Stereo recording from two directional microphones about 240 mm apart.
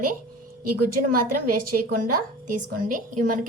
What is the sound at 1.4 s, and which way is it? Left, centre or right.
Speech, right.